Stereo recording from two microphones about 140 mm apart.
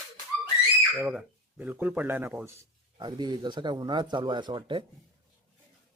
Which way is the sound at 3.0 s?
30° right (ahead or behind).